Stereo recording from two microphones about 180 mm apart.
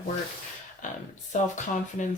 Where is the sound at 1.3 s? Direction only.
45° left (ahead or behind).